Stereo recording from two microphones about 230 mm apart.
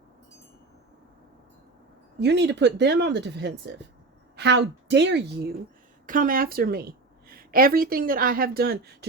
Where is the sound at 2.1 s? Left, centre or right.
Right.